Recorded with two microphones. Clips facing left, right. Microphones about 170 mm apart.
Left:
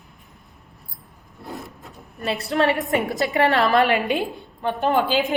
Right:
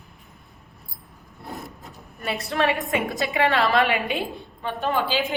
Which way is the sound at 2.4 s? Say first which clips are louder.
Left 3 dB; 30° left (ahead or behind).